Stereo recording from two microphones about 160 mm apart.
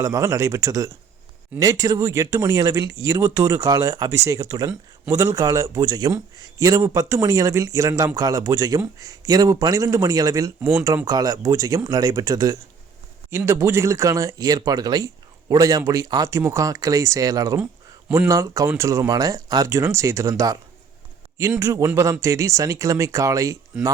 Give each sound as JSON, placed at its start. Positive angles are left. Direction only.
{"t": 0.0, "sound": "speech", "side_deg": -20}